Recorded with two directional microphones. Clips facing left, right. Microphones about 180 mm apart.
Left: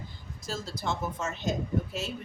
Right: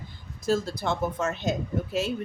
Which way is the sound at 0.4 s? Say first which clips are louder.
Right 8 dB; 60° right (ahead or behind).